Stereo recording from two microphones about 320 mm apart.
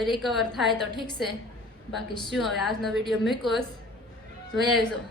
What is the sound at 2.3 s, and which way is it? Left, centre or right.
A woman's voice, centre.